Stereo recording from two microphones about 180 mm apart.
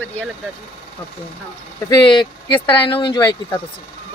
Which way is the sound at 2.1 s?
30° left (ahead or behind).